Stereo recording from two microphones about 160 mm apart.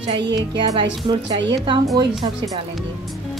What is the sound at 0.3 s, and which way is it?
Speech, 25° right (ahead or behind).